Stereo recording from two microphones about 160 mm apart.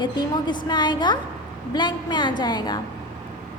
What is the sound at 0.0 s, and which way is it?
A woman's voice, 30° left (ahead or behind).